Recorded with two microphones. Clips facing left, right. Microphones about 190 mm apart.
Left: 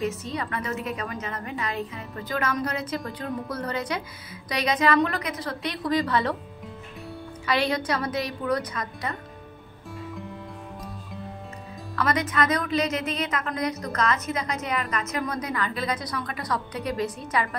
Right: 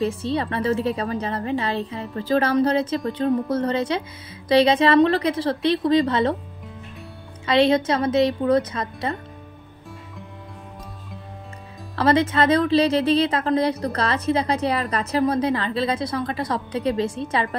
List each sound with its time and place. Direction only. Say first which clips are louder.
0.0 s speech: right 6 dB; 30° right (ahead or behind)
7.4 s speech: right 8 dB; 25° right (ahead or behind)
11.9 s speech: right 7 dB; 30° right (ahead or behind)